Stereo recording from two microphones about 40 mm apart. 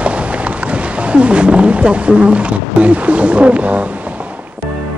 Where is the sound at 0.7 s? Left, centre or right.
Right.